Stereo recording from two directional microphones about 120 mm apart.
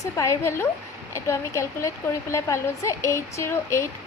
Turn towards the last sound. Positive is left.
turn(degrees=25)  # may be behind; listen again after turning